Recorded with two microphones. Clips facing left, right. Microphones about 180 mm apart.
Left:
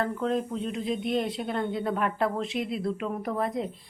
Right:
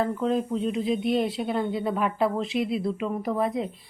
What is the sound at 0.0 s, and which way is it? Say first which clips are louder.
Speech: right 3 dB; centre (ahead or behind).